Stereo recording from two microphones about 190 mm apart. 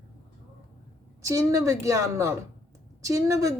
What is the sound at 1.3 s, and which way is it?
Speech, 15° right (ahead or behind).